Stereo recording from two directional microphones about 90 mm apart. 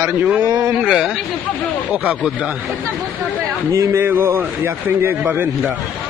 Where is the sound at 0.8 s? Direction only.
5° right (ahead or behind).